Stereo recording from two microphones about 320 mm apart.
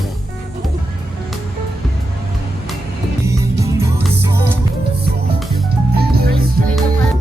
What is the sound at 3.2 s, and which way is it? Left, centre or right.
Music, centre.